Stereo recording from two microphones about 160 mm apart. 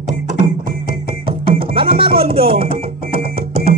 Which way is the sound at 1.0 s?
30° right (ahead or behind).